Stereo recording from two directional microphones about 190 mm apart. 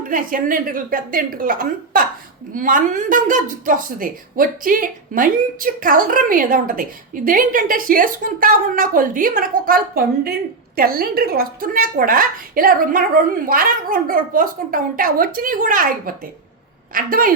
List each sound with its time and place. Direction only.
0.1 s a woman's voice: 45° right (ahead or behind)